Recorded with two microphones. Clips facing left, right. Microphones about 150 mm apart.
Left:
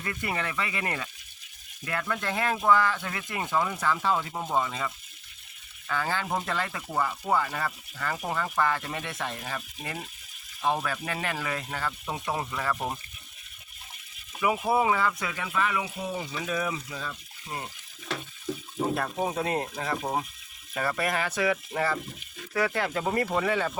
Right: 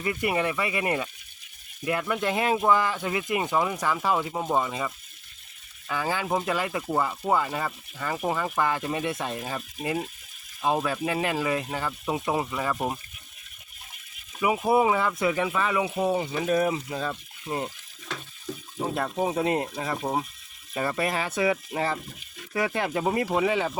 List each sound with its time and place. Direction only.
0.0 s speech: 15° right (ahead or behind)
5.9 s speech: 15° right (ahead or behind)
14.7 s speech: 20° right (ahead or behind)
16.0 s speech: 50° right (ahead or behind)
18.9 s speech: 20° right (ahead or behind)